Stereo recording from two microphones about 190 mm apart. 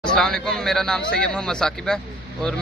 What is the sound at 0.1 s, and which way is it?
Speech, 5° left (ahead or behind).